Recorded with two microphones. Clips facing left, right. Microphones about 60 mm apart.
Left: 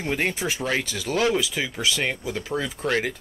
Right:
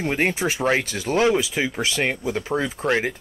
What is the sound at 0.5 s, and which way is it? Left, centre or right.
Speech, right.